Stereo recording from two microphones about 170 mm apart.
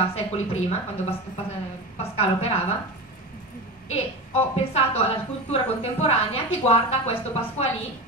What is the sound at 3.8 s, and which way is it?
A woman's voice, 35° left (ahead or behind).